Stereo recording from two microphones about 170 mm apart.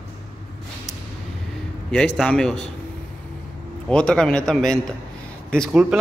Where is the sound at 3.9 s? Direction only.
5° left (ahead or behind).